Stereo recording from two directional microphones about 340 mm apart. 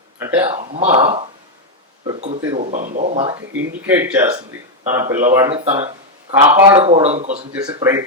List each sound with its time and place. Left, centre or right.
0.2 s speech: centre
3.7 s speech: centre